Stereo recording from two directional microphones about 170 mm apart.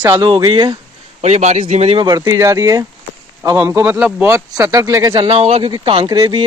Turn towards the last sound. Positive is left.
turn(degrees=-25)  # may be behind; listen again after turning